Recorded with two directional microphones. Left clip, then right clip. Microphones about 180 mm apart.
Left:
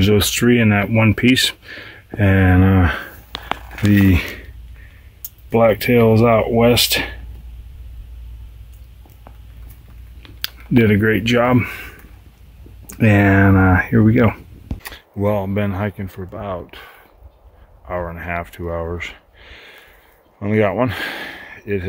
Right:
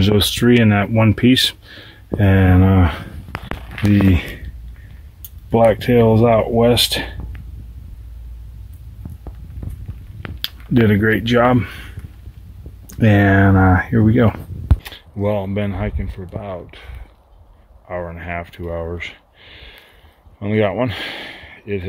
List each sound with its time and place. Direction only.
0.0 s speech: 10° left (ahead or behind)
3.3 s a sound: centre (ahead or behind)
5.5 s speech: 15° left (ahead or behind)
10.4 s speech: 5° left (ahead or behind)
14.8 s speech: 5° left (ahead or behind)